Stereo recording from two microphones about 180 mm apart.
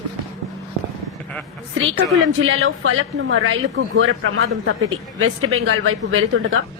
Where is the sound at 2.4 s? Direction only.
90° right.